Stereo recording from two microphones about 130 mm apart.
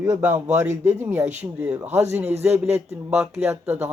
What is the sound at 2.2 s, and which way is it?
Speech, 55° right (ahead or behind).